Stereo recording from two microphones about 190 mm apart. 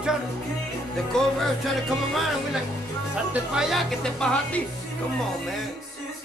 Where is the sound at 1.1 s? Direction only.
5° left (ahead or behind).